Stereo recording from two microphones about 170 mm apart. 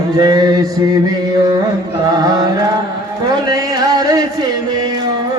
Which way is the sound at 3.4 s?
20° right (ahead or behind).